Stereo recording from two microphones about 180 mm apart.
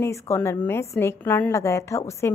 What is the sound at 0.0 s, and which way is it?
A woman's voice, 15° left (ahead or behind).